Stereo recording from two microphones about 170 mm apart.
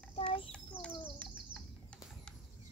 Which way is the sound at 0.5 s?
5° left (ahead or behind).